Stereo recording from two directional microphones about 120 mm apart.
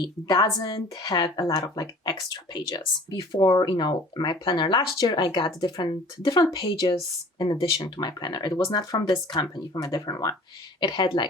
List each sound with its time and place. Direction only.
0.0 s a woman's voice: 35° left (ahead or behind)